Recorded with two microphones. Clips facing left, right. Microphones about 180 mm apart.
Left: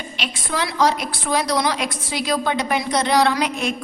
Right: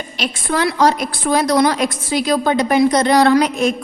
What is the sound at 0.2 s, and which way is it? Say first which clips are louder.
A woman's voice: right 7 dB; 50° right (ahead or behind).